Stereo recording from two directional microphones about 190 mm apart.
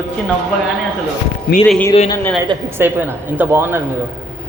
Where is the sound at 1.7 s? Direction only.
5° left (ahead or behind).